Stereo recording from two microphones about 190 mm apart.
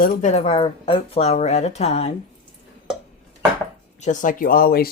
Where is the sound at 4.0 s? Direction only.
40° left (ahead or behind).